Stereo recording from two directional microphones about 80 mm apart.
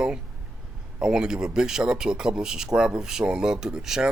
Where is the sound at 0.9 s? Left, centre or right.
Centre.